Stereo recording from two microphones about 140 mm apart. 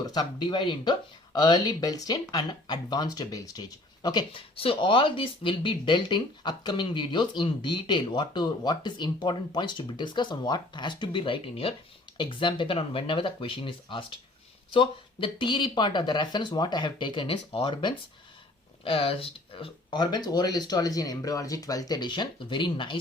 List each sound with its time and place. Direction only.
0.0 s speech: 30° left (ahead or behind)